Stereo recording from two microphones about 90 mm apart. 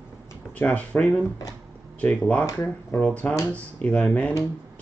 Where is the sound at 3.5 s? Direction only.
15° left (ahead or behind).